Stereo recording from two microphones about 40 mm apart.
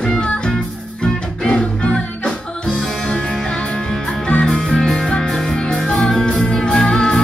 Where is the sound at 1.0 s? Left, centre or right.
Left.